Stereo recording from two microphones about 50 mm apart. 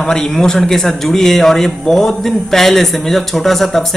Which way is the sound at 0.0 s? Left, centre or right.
Centre.